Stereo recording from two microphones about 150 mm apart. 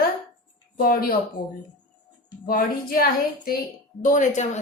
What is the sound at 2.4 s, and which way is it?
Speech, 80° left.